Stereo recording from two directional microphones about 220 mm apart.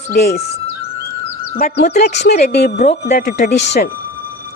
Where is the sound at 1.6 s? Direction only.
45° left (ahead or behind).